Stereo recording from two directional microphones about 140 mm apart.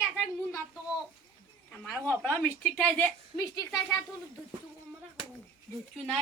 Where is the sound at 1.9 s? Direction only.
15° left (ahead or behind).